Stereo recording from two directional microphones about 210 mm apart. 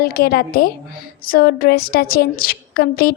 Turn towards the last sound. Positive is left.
turn(degrees=45)  # may be behind; listen again after turning